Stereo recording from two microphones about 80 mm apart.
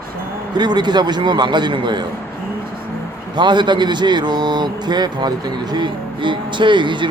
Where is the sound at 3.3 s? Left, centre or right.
Right.